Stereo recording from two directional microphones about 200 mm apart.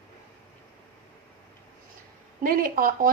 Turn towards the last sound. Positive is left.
turn(degrees=-45)  # may be behind; listen again after turning